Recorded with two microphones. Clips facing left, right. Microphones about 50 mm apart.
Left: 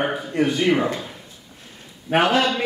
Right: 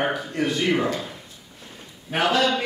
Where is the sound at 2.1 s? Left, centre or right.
Left.